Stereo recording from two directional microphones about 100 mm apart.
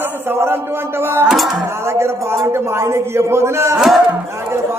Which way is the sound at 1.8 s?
25° right (ahead or behind).